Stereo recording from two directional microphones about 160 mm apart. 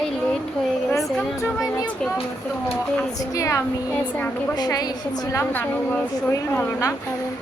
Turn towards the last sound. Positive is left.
turn(degrees=15)  # may be behind; listen again after turning